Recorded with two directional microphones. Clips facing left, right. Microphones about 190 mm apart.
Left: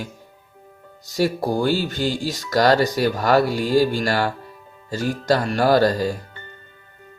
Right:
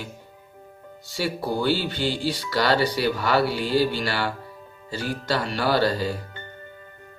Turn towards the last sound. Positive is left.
turn(degrees=45)  # may be behind; listen again after turning